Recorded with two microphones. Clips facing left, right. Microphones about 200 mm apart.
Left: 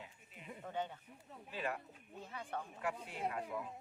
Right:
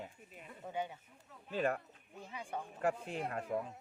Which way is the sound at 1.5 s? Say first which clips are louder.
Right 7 dB; 45° right (ahead or behind).